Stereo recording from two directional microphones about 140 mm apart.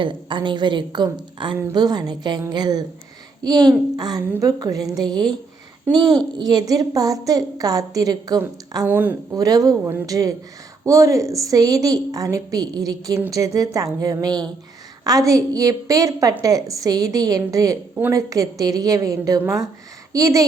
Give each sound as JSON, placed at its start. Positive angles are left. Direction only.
{"t": 0.0, "sound": "a woman's voice", "side_deg": -35}
{"t": 8.9, "sound": "a woman's voice", "side_deg": -15}
{"t": 9.3, "sound": "a woman's voice", "side_deg": -25}
{"t": 17.9, "sound": "a woman's voice", "side_deg": -15}
{"t": 18.3, "sound": "a woman's voice", "side_deg": -25}